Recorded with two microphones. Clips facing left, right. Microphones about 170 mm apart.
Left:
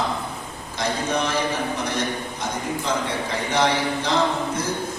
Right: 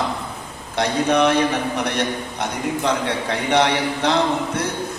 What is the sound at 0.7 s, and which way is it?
A man's voice, 65° right (ahead or behind).